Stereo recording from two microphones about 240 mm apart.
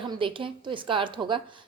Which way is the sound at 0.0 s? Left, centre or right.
Right.